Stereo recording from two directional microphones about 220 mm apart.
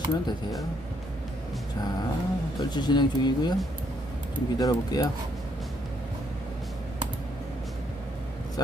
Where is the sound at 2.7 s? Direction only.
20° left (ahead or behind).